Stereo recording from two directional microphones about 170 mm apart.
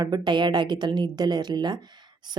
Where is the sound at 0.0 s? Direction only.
25° right (ahead or behind).